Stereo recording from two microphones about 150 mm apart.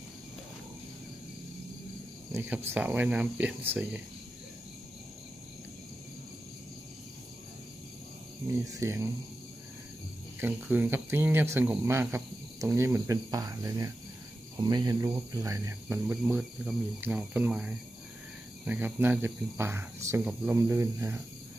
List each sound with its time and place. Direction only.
2.3 s speech: 15° right (ahead or behind)
8.7 s speech: 20° right (ahead or behind)
10.4 s speech: 10° right (ahead or behind)